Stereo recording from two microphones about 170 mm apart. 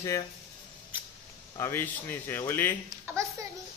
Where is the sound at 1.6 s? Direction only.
15° left (ahead or behind).